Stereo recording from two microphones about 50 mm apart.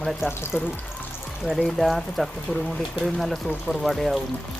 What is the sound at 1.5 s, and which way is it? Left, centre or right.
Speech, centre.